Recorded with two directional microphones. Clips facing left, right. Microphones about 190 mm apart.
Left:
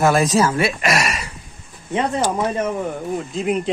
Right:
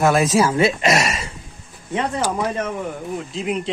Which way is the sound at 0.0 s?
5° right (ahead or behind).